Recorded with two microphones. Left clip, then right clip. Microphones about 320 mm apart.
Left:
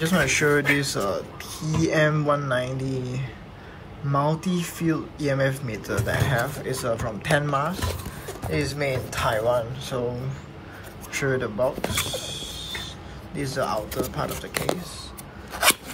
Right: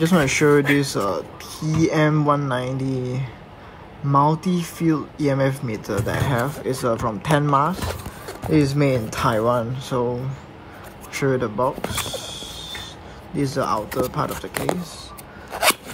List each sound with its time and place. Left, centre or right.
0.0 s speech: centre
11.1 s speech: centre